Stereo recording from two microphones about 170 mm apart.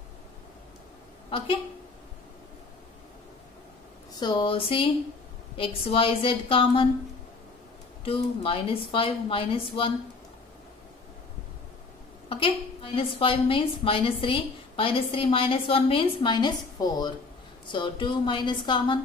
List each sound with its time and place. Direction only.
4.2 s a woman's voice: 25° left (ahead or behind)
8.0 s a woman's voice: 35° left (ahead or behind)
12.3 s a woman's voice: 30° left (ahead or behind)